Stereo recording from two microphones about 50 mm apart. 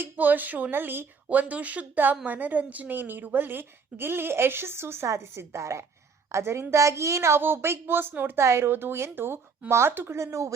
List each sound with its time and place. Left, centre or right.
0.2 s a woman's voice: right
6.3 s a woman's voice: right
7.4 s a woman's voice: right
8.4 s a woman's voice: right
9.6 s speech: right